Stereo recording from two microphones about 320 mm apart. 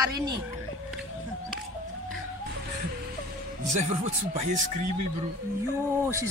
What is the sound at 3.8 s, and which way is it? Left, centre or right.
Speech, centre.